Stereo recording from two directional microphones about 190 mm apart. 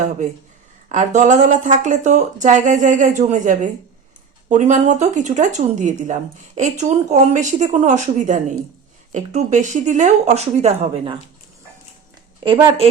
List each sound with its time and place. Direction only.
0.9 s speech: 40° right (ahead or behind)
12.4 s a woman's voice: 20° right (ahead or behind)